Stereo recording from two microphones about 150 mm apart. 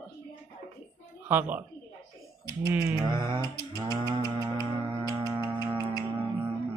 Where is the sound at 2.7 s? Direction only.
10° right (ahead or behind).